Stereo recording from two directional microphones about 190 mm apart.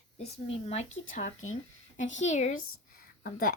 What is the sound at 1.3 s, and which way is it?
Speech, 90° left.